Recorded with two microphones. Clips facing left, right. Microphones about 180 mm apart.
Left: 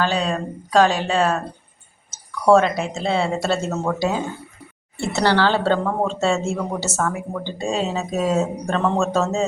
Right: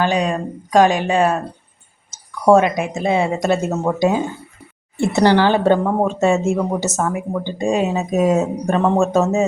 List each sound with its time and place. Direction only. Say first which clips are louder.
0.0 s speech: right 3 dB; 15° right (ahead or behind)